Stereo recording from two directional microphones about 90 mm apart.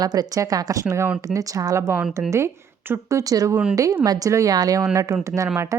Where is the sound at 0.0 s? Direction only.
45° right (ahead or behind).